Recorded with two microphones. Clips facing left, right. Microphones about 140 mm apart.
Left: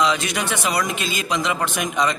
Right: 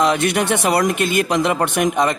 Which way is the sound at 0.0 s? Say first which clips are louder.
Right 4 dB; 60° right (ahead or behind).